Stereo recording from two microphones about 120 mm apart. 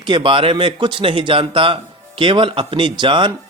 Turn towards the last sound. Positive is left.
turn(degrees=-40)  # may be behind; listen again after turning